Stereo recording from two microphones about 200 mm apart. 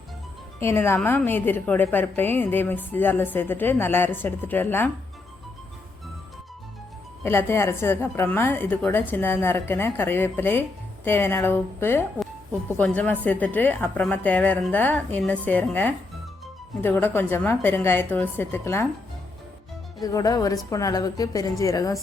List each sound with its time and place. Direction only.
0.6 s a woman's voice: 10° left (ahead or behind)
7.3 s a woman's voice: 10° left (ahead or behind)
20.0 s a woman's voice: 20° left (ahead or behind)